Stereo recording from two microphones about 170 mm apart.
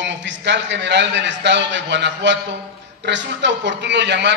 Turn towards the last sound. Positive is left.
turn(degrees=-90)